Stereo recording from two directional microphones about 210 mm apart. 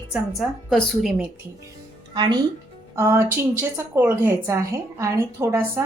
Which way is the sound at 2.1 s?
20° right (ahead or behind).